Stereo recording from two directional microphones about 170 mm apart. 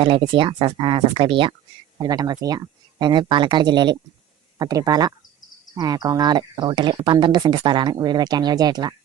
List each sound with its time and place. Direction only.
0.0 s speech: 30° right (ahead or behind)